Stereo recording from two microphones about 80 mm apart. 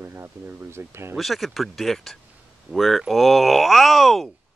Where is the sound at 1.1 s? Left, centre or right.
Centre.